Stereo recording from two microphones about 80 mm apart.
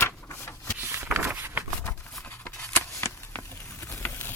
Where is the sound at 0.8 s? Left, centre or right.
Right.